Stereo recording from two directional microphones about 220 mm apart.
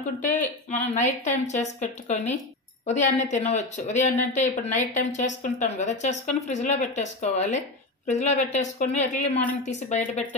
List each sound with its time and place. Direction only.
0.2 s speech: 35° left (ahead or behind)